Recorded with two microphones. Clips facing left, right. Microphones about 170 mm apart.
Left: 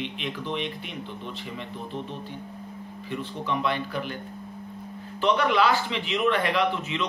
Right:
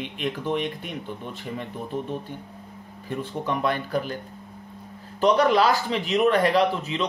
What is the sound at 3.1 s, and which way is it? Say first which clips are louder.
Speech: right 3 dB; 45° right (ahead or behind).